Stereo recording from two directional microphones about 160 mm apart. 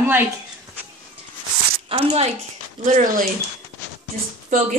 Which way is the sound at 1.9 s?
35° right (ahead or behind).